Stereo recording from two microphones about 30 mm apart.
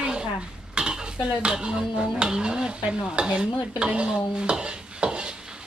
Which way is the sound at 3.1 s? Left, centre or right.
Right.